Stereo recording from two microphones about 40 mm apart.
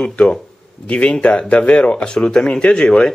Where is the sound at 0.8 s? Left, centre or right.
Left.